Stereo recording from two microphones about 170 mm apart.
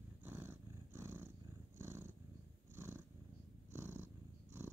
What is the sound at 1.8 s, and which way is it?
Purr, 15° right (ahead or behind).